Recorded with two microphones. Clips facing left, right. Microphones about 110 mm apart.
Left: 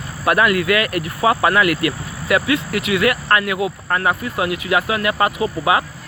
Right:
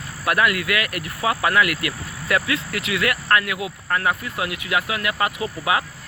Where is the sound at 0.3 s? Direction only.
30° left (ahead or behind).